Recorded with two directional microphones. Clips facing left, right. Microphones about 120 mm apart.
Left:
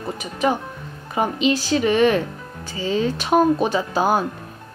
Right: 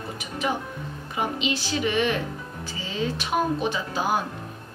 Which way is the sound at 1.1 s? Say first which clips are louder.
Left 7 dB; 45° left (ahead or behind).